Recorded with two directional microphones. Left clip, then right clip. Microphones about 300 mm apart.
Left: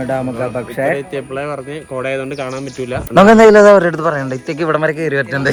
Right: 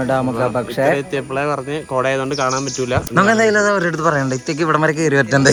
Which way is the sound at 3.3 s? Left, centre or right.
Left.